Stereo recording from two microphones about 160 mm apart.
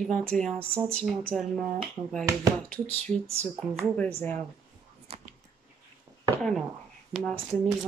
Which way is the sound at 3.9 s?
10° left (ahead or behind).